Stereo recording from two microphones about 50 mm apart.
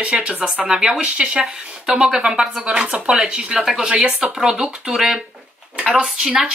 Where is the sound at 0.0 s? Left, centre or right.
Right.